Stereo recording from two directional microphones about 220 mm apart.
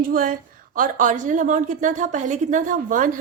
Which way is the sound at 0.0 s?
40° right (ahead or behind).